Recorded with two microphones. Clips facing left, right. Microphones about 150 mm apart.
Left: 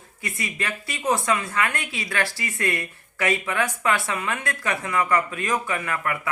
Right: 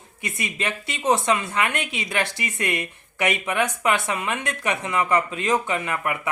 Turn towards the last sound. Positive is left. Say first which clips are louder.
# right 1 dB
turn(degrees=-20)  # may be behind; listen again after turning